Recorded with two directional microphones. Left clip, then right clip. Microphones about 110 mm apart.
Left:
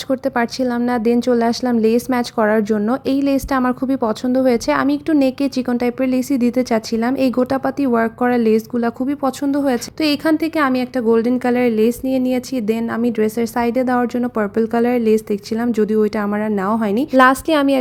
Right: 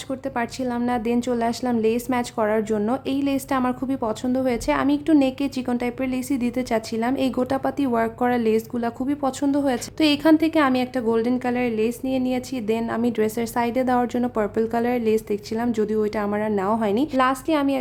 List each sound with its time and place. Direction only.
0.1 s a woman's voice: 45° left (ahead or behind); by 11.3 s 25° left (ahead or behind)
11.4 s a woman's voice: 40° left (ahead or behind)
17.2 s a woman's voice: 60° left (ahead or behind)